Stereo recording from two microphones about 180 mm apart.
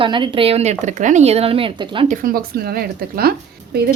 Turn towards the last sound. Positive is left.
turn(degrees=-60)  # may be behind; listen again after turning